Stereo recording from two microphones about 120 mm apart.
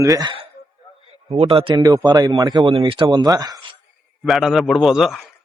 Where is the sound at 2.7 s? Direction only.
45° right (ahead or behind).